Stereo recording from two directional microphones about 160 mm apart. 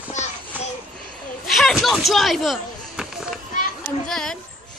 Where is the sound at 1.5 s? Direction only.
Centre (ahead or behind).